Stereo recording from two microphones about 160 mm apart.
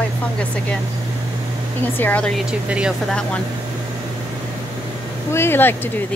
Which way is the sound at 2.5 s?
5° right (ahead or behind).